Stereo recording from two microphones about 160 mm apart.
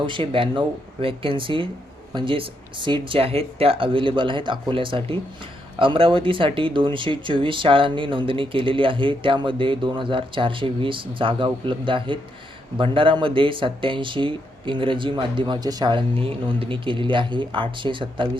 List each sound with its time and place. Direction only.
0.0 s speech: 30° right (ahead or behind)